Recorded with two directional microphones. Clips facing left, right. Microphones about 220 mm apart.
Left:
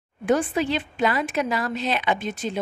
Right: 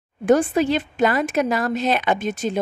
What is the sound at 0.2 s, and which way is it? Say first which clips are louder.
A woman's voice: right 5 dB; 45° right (ahead or behind).